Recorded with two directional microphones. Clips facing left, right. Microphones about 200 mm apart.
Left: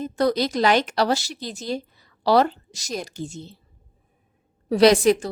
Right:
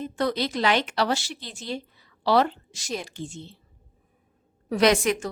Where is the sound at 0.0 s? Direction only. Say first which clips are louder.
Left 5 dB; 40° left (ahead or behind).